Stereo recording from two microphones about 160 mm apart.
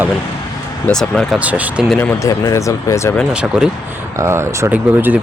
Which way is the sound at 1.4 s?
10° right (ahead or behind).